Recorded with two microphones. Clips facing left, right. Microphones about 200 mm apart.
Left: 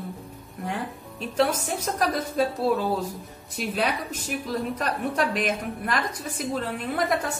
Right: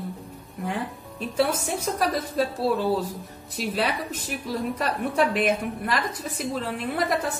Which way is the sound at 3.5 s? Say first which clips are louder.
Even; centre (ahead or behind).